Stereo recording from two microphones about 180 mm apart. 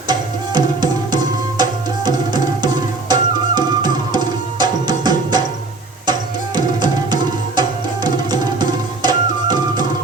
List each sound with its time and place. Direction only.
0.1 s music: 25° right (ahead or behind)
6.6 s music: 20° right (ahead or behind)